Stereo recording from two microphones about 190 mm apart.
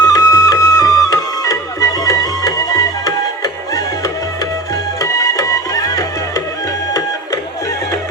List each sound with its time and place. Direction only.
0.0 s music: 20° left (ahead or behind)